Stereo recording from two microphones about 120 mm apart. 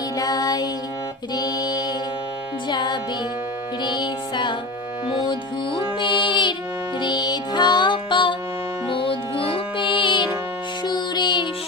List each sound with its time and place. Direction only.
0.2 s music: 30° left (ahead or behind)